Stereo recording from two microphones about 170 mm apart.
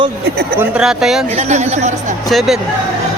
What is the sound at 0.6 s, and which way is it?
Speech, 5° right (ahead or behind).